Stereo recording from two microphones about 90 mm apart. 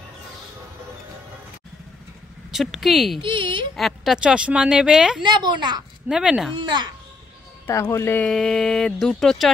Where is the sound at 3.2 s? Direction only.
70° right (ahead or behind).